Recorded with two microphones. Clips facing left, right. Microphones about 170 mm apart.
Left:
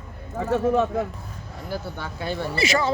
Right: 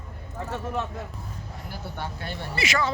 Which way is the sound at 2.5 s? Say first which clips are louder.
Left 3 dB; 30° left (ahead or behind).